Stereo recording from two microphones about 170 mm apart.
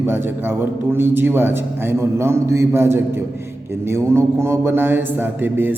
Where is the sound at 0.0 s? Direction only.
15° right (ahead or behind).